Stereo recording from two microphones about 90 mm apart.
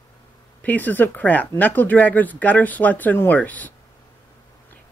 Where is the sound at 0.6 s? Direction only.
20° left (ahead or behind).